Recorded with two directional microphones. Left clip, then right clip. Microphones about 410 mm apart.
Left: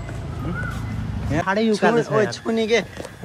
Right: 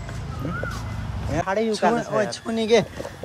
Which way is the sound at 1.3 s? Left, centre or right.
Centre.